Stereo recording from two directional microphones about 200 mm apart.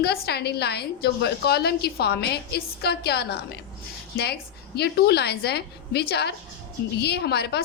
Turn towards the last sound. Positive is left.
turn(degrees=55)  # may be behind; listen again after turning